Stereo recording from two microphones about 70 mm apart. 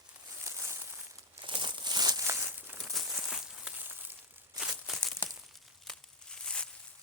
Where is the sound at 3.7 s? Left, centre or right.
Right.